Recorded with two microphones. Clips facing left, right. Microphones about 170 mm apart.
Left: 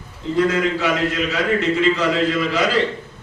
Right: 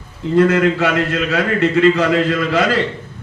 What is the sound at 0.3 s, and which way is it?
Speech, 60° right (ahead or behind).